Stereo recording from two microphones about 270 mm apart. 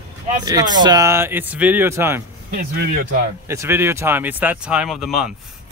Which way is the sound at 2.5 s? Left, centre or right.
Right.